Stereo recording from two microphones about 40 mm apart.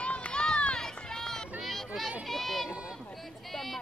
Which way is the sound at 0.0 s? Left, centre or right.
Left.